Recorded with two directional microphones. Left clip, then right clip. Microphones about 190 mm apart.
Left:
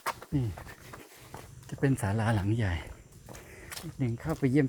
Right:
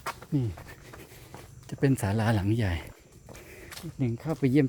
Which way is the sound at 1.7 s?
40° right (ahead or behind).